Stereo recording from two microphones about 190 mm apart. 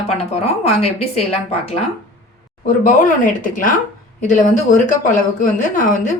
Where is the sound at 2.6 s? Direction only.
45° left (ahead or behind).